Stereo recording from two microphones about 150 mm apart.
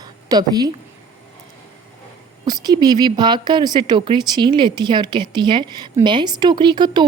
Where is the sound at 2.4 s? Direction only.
25° right (ahead or behind).